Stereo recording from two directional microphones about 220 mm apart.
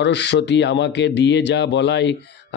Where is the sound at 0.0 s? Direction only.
50° left (ahead or behind).